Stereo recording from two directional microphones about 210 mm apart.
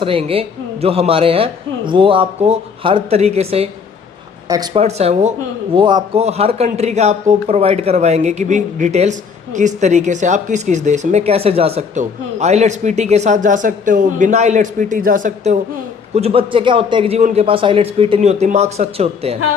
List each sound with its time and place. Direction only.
0.0 s a man's voice: 25° right (ahead or behind)
4.4 s speech: 20° right (ahead or behind)
4.8 s speech: 30° right (ahead or behind)
16.1 s a man's voice: 30° right (ahead or behind)